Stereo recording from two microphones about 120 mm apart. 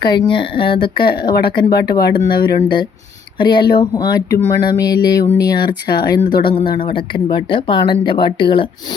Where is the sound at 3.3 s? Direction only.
40° left (ahead or behind).